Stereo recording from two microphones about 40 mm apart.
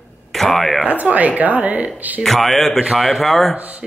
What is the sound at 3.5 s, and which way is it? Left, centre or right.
Speech, right.